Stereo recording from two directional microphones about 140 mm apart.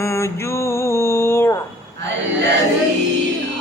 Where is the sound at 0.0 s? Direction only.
20° left (ahead or behind).